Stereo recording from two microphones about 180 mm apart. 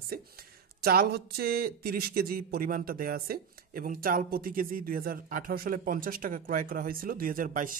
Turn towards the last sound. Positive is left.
turn(degrees=-50)  # may be behind; listen again after turning